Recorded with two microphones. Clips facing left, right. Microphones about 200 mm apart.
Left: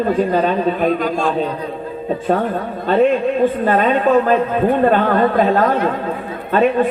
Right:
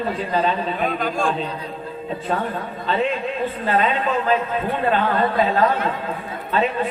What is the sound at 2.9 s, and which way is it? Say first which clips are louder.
Speech: left 9 dB; 50° left (ahead or behind).